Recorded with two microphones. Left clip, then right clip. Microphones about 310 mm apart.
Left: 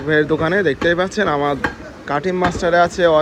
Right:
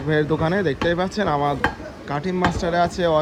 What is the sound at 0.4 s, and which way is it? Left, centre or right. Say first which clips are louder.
Speech: left 5 dB; centre.